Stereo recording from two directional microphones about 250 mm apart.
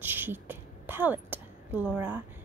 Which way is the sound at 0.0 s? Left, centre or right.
Centre.